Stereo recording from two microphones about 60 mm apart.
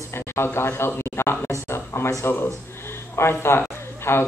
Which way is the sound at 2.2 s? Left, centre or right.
Left.